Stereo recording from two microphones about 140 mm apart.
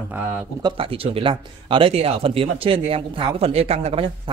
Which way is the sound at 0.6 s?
40° right (ahead or behind).